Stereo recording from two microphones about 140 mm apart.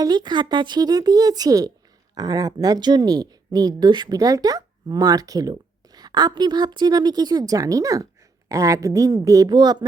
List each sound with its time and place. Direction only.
0.0 s speech: 30° right (ahead or behind)